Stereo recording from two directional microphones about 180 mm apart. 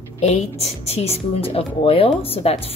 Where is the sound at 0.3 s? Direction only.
35° left (ahead or behind).